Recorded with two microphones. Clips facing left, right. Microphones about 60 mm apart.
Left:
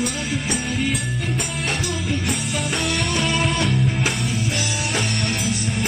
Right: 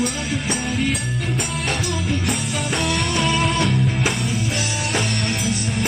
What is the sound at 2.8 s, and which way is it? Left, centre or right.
Music, centre.